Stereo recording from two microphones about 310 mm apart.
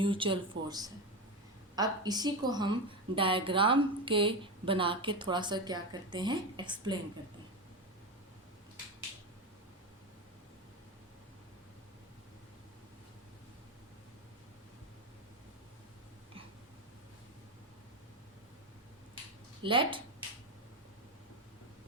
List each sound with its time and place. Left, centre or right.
0.0 s speech: centre
19.6 s speech: centre